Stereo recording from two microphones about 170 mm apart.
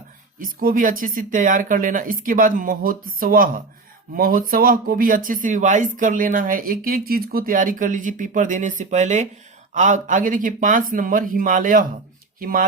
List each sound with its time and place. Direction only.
0.3 s speech: 55° right (ahead or behind)